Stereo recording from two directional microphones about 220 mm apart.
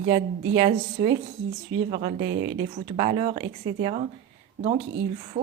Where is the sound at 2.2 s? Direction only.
55° right (ahead or behind).